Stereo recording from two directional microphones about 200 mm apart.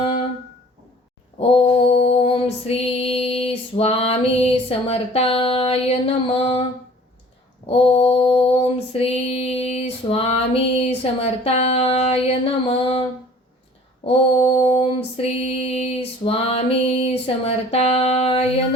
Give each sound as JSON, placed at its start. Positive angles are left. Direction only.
{"t": 1.4, "sound": "female singing", "side_deg": 30}
{"t": 7.7, "sound": "mantra", "side_deg": 30}
{"t": 12.6, "sound": "a sound", "side_deg": 30}
{"t": 15.6, "sound": "female singing", "side_deg": 30}